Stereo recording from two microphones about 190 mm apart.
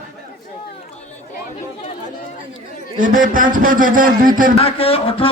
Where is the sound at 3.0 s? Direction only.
45° right (ahead or behind).